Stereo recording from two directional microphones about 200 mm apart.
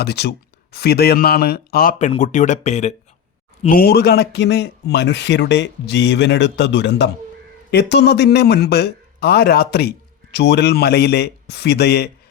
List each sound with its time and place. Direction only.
0.0 s speech: 55° left (ahead or behind); by 2.9 s 35° left (ahead or behind)
3.7 s speech: 50° left (ahead or behind)